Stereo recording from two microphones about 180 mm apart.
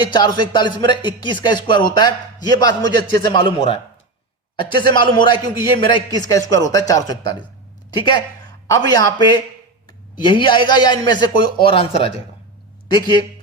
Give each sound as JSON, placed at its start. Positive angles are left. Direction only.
{"t": 0.0, "sound": "a man's voice", "side_deg": 25}